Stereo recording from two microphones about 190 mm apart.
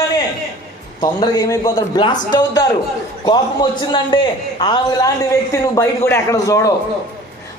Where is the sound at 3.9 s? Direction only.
25° left (ahead or behind).